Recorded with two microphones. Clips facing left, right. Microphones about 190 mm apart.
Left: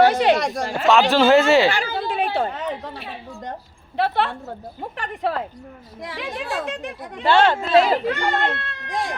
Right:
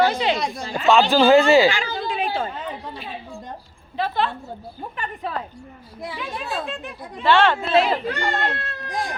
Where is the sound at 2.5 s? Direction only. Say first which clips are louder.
Left 3 dB; 75° left (ahead or behind).